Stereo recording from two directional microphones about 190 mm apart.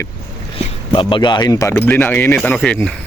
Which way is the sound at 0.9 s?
25° left (ahead or behind).